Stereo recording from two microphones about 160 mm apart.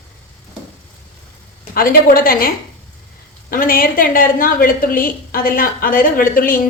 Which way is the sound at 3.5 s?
65° left (ahead or behind).